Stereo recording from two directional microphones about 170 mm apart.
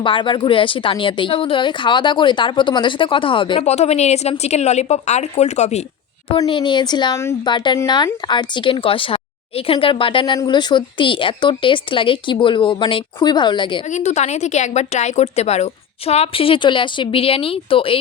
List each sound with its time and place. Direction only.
0.0 s a woman's voice: 30° left (ahead or behind)
6.4 s speech: 30° left (ahead or behind)
13.9 s a woman's voice: 40° left (ahead or behind)